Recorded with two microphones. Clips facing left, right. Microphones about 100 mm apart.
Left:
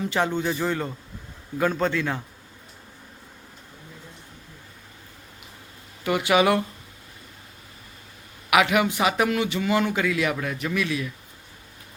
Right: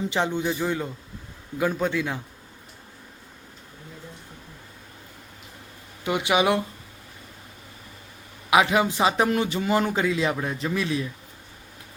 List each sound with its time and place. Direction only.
0.0 s speech: 20° right (ahead or behind)
6.1 s a man's voice: 20° right (ahead or behind)
8.4 s a man's voice: 25° right (ahead or behind)